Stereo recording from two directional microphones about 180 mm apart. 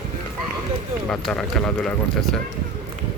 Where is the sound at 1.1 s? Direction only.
5° left (ahead or behind).